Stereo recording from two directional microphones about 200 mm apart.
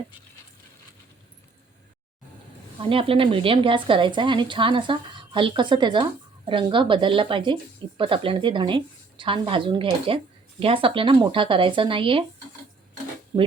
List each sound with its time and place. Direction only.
2.8 s speech: 25° right (ahead or behind)